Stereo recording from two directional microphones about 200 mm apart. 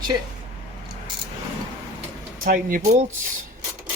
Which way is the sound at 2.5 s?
45° right (ahead or behind).